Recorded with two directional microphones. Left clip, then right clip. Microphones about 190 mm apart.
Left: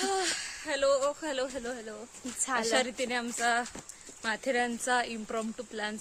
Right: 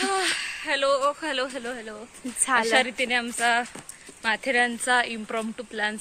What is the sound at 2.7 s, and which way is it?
A woman's voice, 25° left (ahead or behind).